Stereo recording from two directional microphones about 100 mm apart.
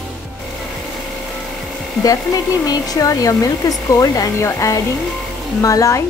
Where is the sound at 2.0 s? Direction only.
35° left (ahead or behind).